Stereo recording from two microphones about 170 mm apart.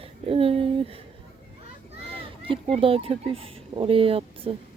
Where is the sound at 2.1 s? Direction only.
30° right (ahead or behind).